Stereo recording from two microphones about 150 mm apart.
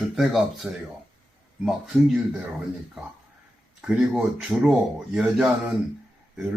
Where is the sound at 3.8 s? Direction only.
5° right (ahead or behind).